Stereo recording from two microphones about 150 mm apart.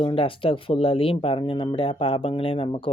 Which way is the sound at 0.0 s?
35° left (ahead or behind).